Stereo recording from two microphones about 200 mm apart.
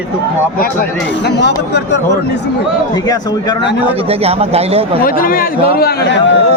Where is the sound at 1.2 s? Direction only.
55° left (ahead or behind).